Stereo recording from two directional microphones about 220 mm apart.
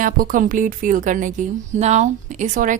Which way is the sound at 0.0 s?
40° right (ahead or behind).